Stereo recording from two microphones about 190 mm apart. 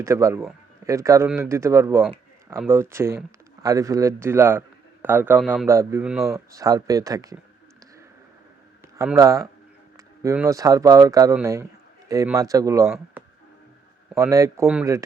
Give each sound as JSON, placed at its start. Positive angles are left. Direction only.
{"t": 0.0, "sound": "a man's voice", "side_deg": -15}
{"t": 5.6, "sound": "speech", "side_deg": -15}
{"t": 9.0, "sound": "speech", "side_deg": -15}
{"t": 14.2, "sound": "speech", "side_deg": -15}